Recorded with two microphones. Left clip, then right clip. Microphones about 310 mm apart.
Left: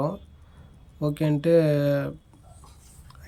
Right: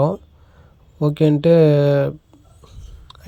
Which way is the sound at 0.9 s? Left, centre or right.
Centre.